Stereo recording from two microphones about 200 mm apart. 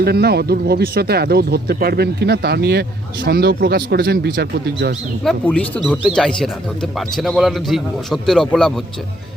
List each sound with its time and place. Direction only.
0.0 s speech: 55° right (ahead or behind)
5.2 s a man's voice: 5° left (ahead or behind)